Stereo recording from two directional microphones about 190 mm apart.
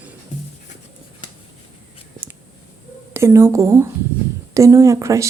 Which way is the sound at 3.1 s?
15° right (ahead or behind).